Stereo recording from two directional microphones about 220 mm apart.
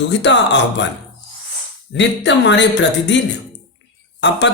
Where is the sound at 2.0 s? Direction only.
55° left (ahead or behind).